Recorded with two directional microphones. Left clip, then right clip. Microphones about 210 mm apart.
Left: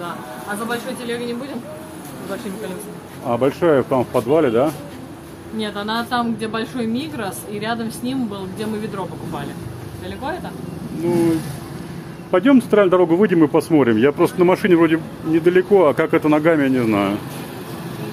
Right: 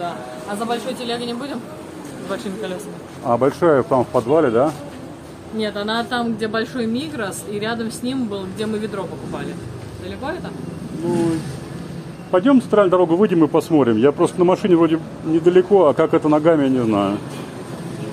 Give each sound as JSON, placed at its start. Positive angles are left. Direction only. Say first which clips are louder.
{"t": 0.7, "sound": "a woman's voice", "louder": "right 3 dB", "side_deg": -15}
{"t": 3.3, "sound": "a man's voice", "louder": "right 1 dB", "side_deg": -5}
{"t": 5.6, "sound": "a woman's voice", "louder": "right 1 dB", "side_deg": -5}
{"t": 12.3, "sound": "a man's voice", "louder": "left 1 dB", "side_deg": 15}